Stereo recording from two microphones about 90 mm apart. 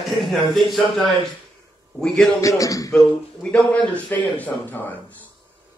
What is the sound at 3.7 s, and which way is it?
Speech, 20° left (ahead or behind).